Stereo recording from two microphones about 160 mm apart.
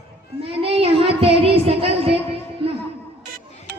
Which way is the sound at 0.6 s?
35° right (ahead or behind).